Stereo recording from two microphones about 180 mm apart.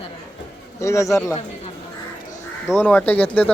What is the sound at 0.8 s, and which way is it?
Speech, 15° left (ahead or behind).